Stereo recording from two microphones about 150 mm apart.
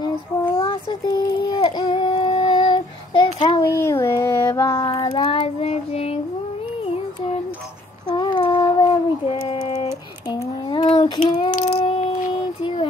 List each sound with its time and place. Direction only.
0.6 s child singing: 30° left (ahead or behind)
3.7 s child singing: 15° left (ahead or behind)
5.0 s child singing: 35° left (ahead or behind)
8.1 s child singing: 30° left (ahead or behind)
11.8 s a sound: 40° left (ahead or behind)